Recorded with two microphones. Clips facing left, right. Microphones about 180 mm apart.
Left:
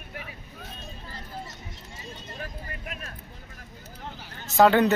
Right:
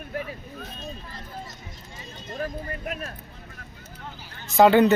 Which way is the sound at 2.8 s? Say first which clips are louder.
Right 8 dB; 40° right (ahead or behind).